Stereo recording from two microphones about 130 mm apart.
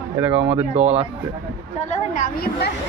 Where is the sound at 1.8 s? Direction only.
75° left (ahead or behind).